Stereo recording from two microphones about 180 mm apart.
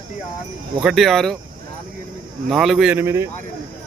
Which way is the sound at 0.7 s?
Centre (ahead or behind).